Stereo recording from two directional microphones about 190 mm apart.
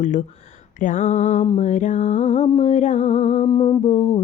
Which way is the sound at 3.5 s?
25° left (ahead or behind).